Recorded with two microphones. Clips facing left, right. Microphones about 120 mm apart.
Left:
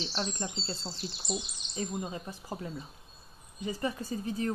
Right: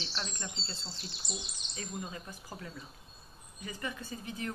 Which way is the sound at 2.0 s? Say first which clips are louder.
Left 5 dB; 30° left (ahead or behind).